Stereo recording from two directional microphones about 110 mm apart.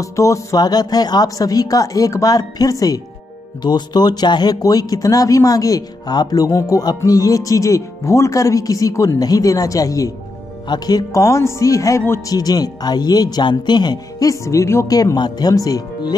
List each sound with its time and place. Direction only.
0.0 s speech: 30° left (ahead or behind)
14.3 s speech: 30° left (ahead or behind)
15.0 s speech: 40° left (ahead or behind)